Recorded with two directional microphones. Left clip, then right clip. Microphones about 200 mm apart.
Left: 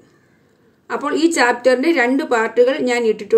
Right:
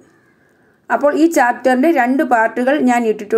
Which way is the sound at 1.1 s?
20° right (ahead or behind).